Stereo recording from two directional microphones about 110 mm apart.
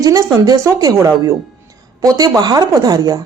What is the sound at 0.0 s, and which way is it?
Speech, 30° right (ahead or behind).